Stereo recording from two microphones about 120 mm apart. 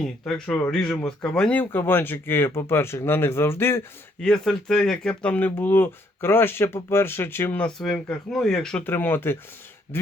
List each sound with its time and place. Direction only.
0.0 s speech: 5° left (ahead or behind); by 3.8 s 20° left (ahead or behind)
4.2 s speech: 5° left (ahead or behind)
8.8 s speech: 15° left (ahead or behind)